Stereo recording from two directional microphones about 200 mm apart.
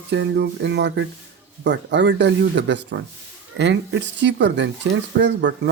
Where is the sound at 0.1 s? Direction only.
60° right (ahead or behind).